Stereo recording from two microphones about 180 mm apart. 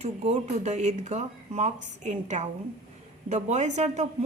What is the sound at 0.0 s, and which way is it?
Speech, 40° right (ahead or behind).